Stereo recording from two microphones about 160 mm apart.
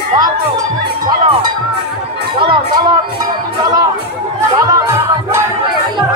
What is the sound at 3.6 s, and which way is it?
Music, 25° right (ahead or behind).